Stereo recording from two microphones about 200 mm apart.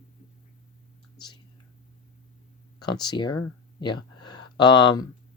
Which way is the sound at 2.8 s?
20° left (ahead or behind).